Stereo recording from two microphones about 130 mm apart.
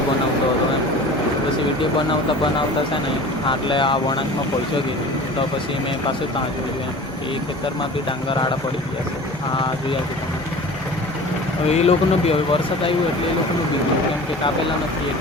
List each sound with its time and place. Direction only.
3.4 s speech: 40° left (ahead or behind)
11.7 s speech: 55° left (ahead or behind)